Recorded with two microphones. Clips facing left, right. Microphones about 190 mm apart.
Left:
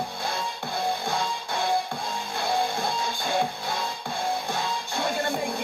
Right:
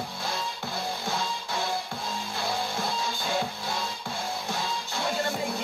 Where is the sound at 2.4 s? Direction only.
55° left (ahead or behind).